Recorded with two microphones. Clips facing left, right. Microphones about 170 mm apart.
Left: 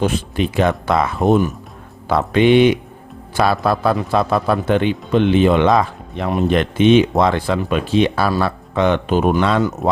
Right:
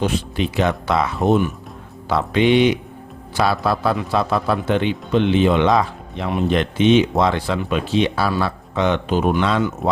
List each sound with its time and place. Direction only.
0.0 s a man's voice: 50° left (ahead or behind)